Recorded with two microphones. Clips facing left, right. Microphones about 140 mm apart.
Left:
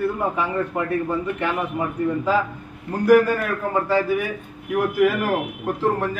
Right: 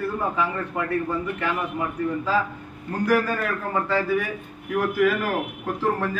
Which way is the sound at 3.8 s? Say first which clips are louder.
Left 2 dB; 15° left (ahead or behind).